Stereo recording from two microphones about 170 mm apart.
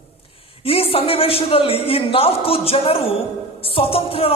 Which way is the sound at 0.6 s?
35° left (ahead or behind).